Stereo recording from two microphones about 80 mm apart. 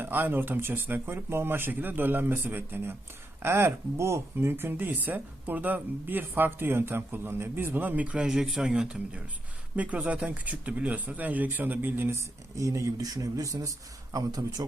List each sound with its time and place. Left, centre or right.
0.0 s a man's voice: right